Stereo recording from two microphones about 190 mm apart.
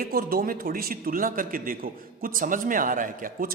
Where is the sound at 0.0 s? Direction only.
50° right (ahead or behind).